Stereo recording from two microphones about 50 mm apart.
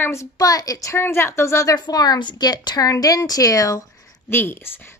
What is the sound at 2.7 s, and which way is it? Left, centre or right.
Speech, left.